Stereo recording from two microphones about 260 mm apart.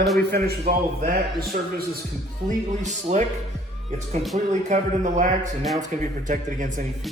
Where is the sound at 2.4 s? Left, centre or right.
Right.